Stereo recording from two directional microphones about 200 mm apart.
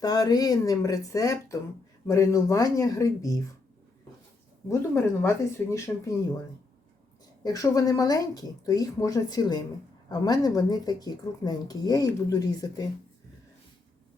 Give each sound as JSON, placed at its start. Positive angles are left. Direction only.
{"t": 0.0, "sound": "speech", "side_deg": 20}
{"t": 4.7, "sound": "speech", "side_deg": 10}
{"t": 7.4, "sound": "speech", "side_deg": 15}